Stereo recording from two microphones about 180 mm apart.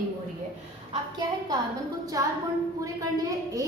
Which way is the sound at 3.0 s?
20° right (ahead or behind).